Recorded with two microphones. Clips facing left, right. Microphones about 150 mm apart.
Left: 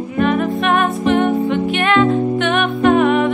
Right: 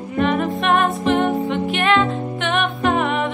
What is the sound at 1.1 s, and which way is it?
Music, centre (ahead or behind).